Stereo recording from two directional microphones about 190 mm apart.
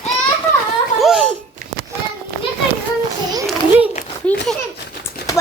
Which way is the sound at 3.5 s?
5° right (ahead or behind).